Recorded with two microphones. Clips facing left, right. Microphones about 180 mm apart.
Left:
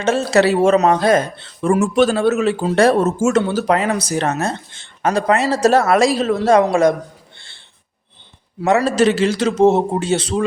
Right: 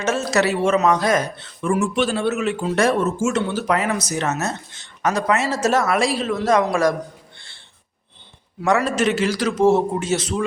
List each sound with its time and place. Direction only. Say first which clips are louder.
0.0 s speech: left 5 dB; 30° left (ahead or behind)
1.7 s speech: left 5 dB; 45° left (ahead or behind)
3.2 s speech: left 5 dB; 45° left (ahead or behind)
3.7 s speech: left 4 dB; 30° left (ahead or behind)
7.3 s a sound: left 1 dB; 25° left (ahead or behind)
8.6 s a man's voice: left 4 dB; 25° left (ahead or behind)